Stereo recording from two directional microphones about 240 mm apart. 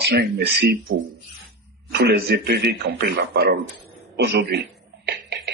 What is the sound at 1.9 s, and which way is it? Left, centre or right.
Speech, right.